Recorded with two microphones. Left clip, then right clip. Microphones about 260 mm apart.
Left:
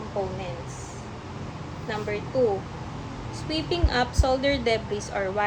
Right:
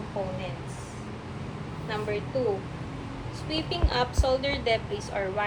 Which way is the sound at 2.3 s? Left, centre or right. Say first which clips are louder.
Left 7 dB; left.